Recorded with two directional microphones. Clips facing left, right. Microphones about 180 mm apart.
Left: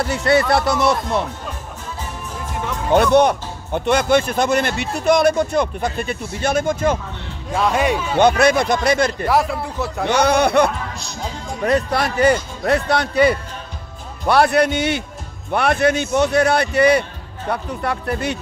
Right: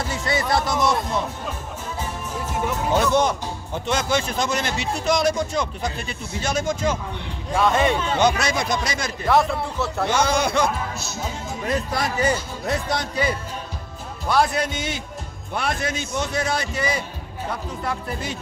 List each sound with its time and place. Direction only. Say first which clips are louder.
0.0 s speech: left 8 dB; 65° left (ahead or behind)
2.9 s speech: left 7 dB; 65° left (ahead or behind)
7.5 s speech: left 1 dB; 10° left (ahead or behind)
8.2 s speech: left 10 dB; 55° left (ahead or behind)
9.3 s speech: right 3 dB; 5° left (ahead or behind)
10.0 s a man's voice: left 6 dB; 60° left (ahead or behind)